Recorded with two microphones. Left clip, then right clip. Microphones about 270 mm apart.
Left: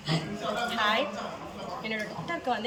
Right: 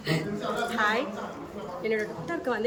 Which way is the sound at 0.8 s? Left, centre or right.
Centre.